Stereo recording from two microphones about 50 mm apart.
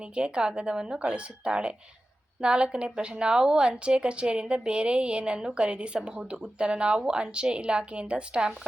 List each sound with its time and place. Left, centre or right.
0.0 s a woman's voice: right